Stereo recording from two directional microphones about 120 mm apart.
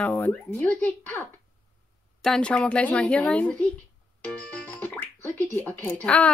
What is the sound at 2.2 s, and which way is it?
Speech, 5° left (ahead or behind).